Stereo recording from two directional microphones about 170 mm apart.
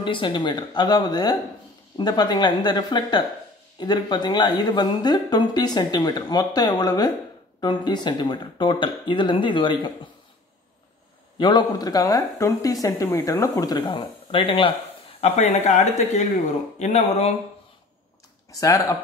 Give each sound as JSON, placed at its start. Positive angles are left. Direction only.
{"t": 0.0, "sound": "a woman's voice", "side_deg": 30}
{"t": 11.3, "sound": "a woman's voice", "side_deg": 25}
{"t": 18.5, "sound": "a woman's voice", "side_deg": 20}